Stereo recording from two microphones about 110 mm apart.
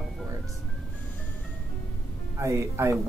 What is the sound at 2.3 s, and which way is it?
Speech, 25° right (ahead or behind).